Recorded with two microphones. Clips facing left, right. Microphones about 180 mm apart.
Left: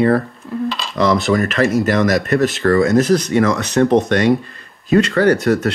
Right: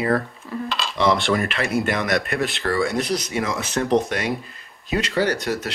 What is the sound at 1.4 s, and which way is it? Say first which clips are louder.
Speech: left 7 dB; 40° left (ahead or behind).